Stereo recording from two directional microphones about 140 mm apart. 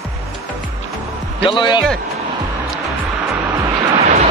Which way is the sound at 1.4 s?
35° left (ahead or behind).